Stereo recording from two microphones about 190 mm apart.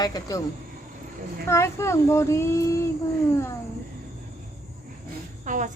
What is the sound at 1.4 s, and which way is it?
Speech, 15° left (ahead or behind).